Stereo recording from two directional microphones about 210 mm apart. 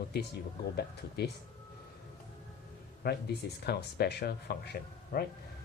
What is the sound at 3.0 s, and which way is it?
Speech, 50° left (ahead or behind).